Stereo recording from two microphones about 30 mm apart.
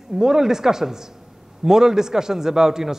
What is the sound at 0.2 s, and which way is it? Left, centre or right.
A woman's voice, centre.